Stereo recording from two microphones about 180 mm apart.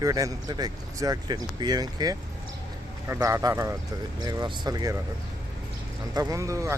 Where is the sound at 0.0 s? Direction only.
20° right (ahead or behind).